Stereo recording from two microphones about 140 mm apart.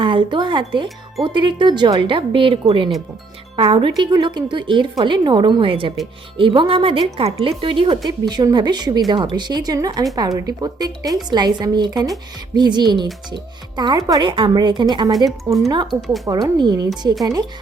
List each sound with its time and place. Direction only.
0.0 s speech: 35° right (ahead or behind)
15.9 s speech: centre (ahead or behind)
16.6 s speech: 30° right (ahead or behind)